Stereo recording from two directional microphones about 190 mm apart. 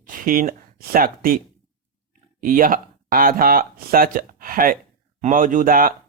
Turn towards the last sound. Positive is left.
turn(degrees=-50)  # may be behind; listen again after turning